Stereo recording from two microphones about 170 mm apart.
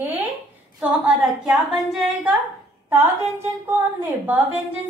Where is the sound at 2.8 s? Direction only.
15° right (ahead or behind).